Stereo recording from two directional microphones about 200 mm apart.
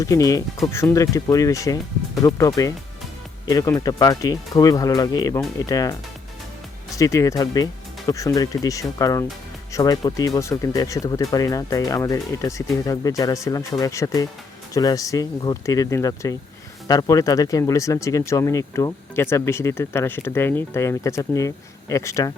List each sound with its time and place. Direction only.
0.0 s speech: 15° left (ahead or behind)
3.4 s speech: 20° left (ahead or behind)